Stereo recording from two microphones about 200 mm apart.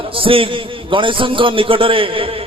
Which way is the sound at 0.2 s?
25° right (ahead or behind).